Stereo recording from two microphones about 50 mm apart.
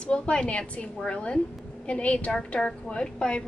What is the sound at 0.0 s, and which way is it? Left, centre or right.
A woman's voice, centre.